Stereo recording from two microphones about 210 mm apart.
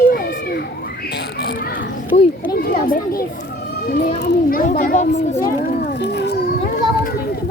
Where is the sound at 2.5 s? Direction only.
45° left (ahead or behind).